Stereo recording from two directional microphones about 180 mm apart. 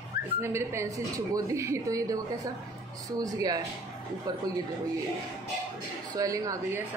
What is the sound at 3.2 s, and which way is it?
Speech, 20° right (ahead or behind).